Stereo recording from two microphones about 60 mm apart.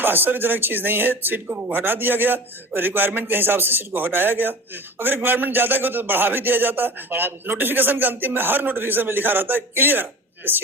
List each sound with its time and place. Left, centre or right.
0.0 s a man's voice: right